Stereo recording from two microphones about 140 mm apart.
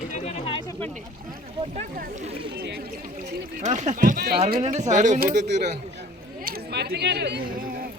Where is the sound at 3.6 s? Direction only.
60° right (ahead or behind); by 4.3 s 80° right.